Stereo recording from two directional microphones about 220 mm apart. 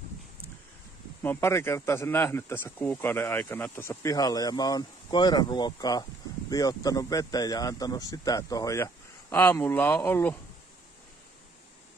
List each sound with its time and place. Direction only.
1.2 s speech: 10° left (ahead or behind)